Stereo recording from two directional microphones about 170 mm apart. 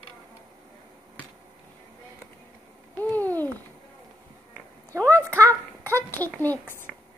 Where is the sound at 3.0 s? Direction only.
10° left (ahead or behind).